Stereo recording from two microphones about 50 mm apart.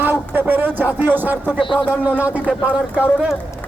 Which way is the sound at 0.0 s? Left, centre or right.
Right.